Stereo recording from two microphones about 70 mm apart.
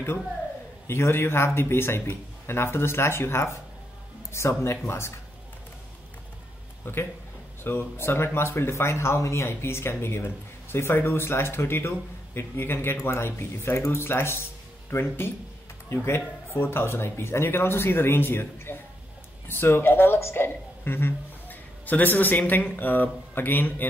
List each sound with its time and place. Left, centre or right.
0.8 s speech: left
6.8 s a man's voice: left